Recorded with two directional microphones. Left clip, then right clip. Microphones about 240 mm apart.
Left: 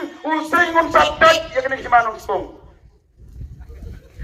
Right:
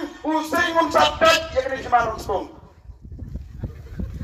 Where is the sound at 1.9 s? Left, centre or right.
Left.